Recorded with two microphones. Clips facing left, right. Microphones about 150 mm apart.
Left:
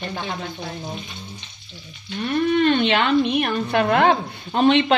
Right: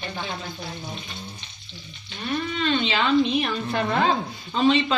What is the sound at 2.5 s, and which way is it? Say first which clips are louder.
A woman's voice: left 7 dB; 55° left (ahead or behind).